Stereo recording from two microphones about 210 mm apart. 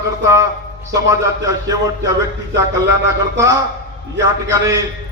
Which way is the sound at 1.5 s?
15° right (ahead or behind).